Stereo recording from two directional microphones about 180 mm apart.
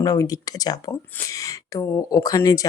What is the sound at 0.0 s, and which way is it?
Speech, 20° left (ahead or behind).